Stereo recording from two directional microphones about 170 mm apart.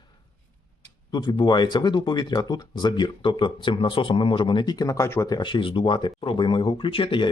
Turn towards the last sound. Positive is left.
turn(degrees=30)  # may be behind; listen again after turning